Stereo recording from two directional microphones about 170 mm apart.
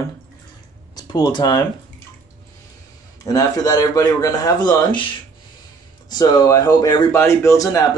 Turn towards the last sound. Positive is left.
turn(degrees=20)  # may be behind; listen again after turning